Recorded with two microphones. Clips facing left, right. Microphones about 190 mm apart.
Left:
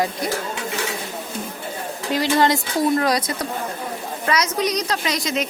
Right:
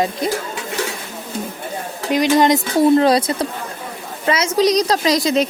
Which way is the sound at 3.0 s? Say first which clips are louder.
Right 6 dB; 30° right (ahead or behind).